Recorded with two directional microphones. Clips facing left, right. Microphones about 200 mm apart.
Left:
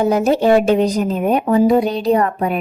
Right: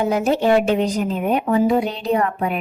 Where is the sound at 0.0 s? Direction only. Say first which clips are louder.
Left 4 dB; 40° left (ahead or behind).